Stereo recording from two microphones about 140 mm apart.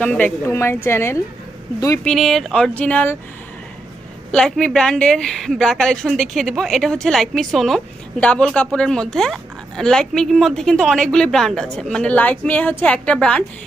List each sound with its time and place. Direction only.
0.0 s speech: 10° left (ahead or behind)
0.4 s speech: 20° left (ahead or behind)
2.0 s speech: centre (ahead or behind)
4.3 s speech: 5° left (ahead or behind)